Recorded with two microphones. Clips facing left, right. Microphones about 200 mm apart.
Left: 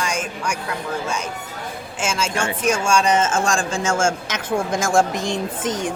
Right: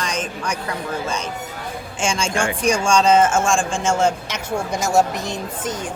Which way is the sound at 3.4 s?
40° left (ahead or behind).